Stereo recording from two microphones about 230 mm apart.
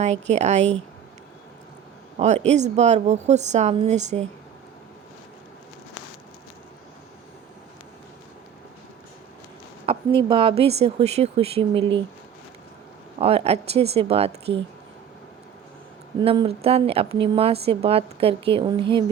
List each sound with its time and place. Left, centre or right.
0.0 s a woman's voice: right
2.1 s a woman's voice: right
9.8 s a woman's voice: right
13.1 s a woman's voice: right
16.2 s a woman's voice: right